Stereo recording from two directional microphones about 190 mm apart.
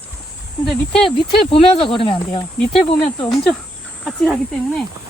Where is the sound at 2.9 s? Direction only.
5° left (ahead or behind).